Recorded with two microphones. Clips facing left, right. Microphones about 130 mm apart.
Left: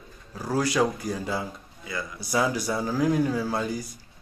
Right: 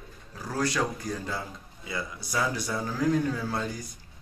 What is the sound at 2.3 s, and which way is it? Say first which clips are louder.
Speech: left 5 dB; 10° left (ahead or behind).